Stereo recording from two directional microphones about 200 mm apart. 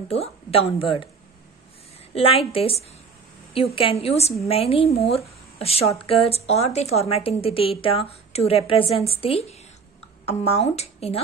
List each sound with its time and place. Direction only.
0.1 s a woman's voice: 30° left (ahead or behind)
2.1 s a woman's voice: 30° left (ahead or behind)